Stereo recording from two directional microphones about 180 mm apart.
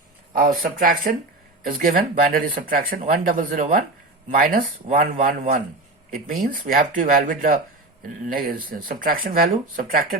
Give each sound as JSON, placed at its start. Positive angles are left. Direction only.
{"t": 0.3, "sound": "speech", "side_deg": -50}